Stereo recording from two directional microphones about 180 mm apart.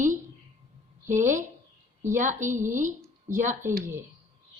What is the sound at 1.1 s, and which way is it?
A woman's voice, 45° right (ahead or behind).